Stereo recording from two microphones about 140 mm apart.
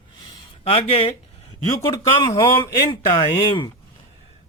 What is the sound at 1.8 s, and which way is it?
Speech, 25° left (ahead or behind).